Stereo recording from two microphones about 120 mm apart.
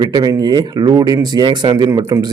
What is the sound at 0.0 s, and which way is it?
A man's voice, 35° right (ahead or behind).